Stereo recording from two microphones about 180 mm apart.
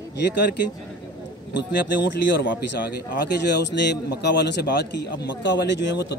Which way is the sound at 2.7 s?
70° left (ahead or behind).